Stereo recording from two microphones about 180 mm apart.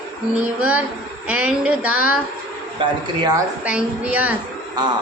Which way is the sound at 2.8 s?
20° right (ahead or behind).